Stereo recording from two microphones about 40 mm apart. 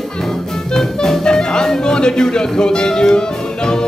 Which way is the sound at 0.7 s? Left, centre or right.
Centre.